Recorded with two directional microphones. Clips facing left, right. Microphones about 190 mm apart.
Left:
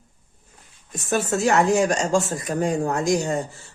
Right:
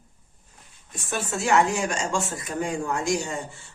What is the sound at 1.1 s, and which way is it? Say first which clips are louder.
Speech: left 3 dB; 40° left (ahead or behind).